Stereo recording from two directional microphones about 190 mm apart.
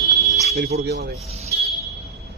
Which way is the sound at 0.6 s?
55° right (ahead or behind).